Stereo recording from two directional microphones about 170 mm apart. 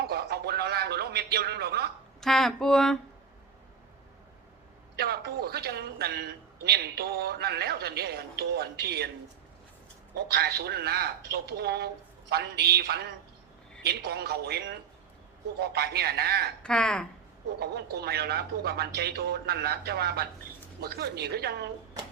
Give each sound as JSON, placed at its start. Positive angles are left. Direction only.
{"t": 0.0, "sound": "a sound", "side_deg": -70}
{"t": 2.2, "sound": "speech", "side_deg": 0}
{"t": 4.9, "sound": "a man's voice", "side_deg": -70}
{"t": 10.2, "sound": "a man's voice", "side_deg": -75}
{"t": 16.6, "sound": "speech", "side_deg": 5}
{"t": 17.6, "sound": "a man's voice", "side_deg": -75}